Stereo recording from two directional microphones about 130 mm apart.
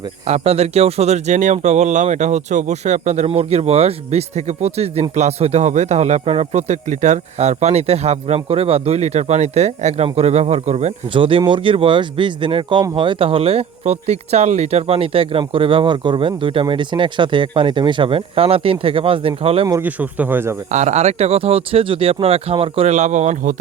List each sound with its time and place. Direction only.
0.3 s speech: 55° right (ahead or behind)
19.8 s speech: 15° right (ahead or behind)
20.7 s speech: 65° right (ahead or behind)